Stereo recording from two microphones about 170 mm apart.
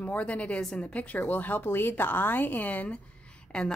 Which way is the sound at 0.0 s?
10° left (ahead or behind).